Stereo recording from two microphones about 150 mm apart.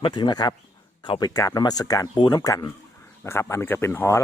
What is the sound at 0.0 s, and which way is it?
Speech, 30° left (ahead or behind).